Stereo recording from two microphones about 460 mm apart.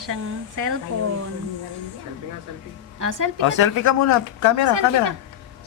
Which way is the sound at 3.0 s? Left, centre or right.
Right.